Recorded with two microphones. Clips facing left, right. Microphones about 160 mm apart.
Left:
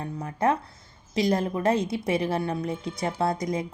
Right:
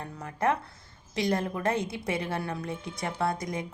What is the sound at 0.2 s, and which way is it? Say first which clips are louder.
Speech: left 3 dB; 25° left (ahead or behind).